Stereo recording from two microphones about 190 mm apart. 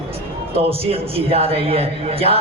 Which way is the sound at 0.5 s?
30° right (ahead or behind).